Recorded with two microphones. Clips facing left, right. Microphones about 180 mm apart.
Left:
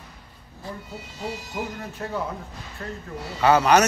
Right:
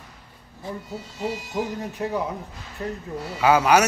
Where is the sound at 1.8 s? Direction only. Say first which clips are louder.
Right 3 dB; 15° right (ahead or behind).